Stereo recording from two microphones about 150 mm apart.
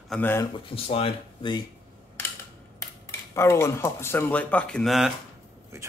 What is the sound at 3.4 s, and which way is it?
Speech, 15° left (ahead or behind).